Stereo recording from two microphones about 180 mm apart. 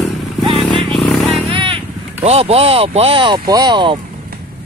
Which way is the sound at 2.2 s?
35° right (ahead or behind).